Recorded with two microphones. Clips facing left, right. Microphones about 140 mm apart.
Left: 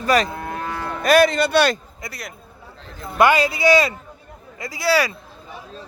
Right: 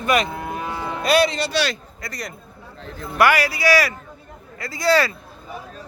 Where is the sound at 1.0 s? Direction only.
50° left (ahead or behind).